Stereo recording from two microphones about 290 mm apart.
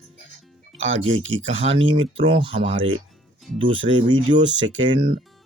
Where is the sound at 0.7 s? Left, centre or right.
Right.